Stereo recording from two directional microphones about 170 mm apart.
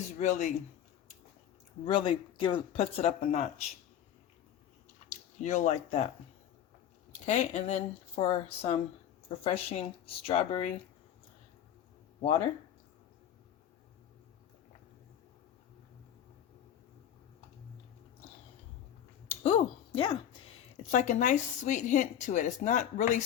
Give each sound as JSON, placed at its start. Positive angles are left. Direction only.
{"t": 0.2, "sound": "a woman's voice", "side_deg": 45}
{"t": 1.8, "sound": "speech", "side_deg": 30}
{"t": 5.4, "sound": "a woman's voice", "side_deg": 45}
{"t": 7.3, "sound": "speech", "side_deg": 40}
{"t": 19.3, "sound": "a sound", "side_deg": 35}
{"t": 20.9, "sound": "a woman's voice", "side_deg": 45}